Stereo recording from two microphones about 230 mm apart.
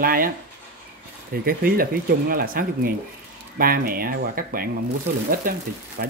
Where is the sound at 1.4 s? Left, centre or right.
Right.